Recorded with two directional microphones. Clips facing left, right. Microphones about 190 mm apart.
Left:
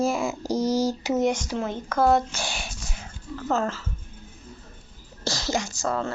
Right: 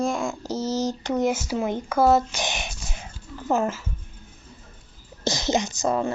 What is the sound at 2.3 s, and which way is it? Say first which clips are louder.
Child singing: right 3 dB; 20° right (ahead or behind).